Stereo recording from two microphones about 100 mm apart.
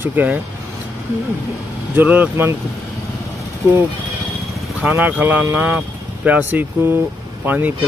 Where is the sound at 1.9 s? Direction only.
15° right (ahead or behind).